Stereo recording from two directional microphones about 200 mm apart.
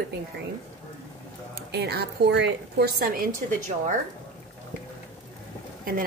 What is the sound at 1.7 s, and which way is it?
A woman's voice, 55° right (ahead or behind).